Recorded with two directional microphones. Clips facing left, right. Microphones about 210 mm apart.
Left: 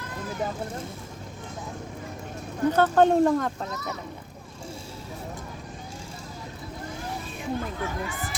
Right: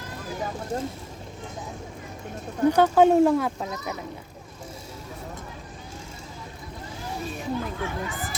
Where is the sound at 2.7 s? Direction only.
10° right (ahead or behind).